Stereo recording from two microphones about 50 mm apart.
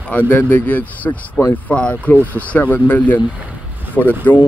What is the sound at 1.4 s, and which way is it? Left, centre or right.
Speech, left.